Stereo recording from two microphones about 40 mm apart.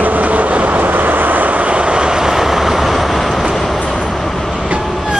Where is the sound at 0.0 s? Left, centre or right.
Right; by 3.4 s centre.